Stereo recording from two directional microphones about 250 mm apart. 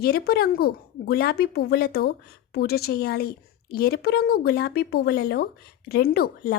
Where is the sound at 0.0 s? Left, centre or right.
Left.